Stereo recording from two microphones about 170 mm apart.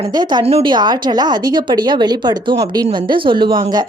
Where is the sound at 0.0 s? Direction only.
25° right (ahead or behind).